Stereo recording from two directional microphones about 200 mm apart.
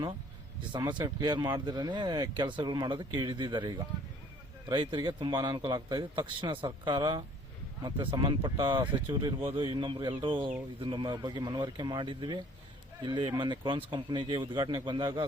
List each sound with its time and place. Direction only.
0.7 s speech: 25° right (ahead or behind)